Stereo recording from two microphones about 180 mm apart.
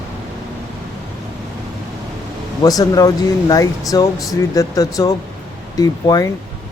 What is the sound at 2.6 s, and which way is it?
Speech, 20° left (ahead or behind).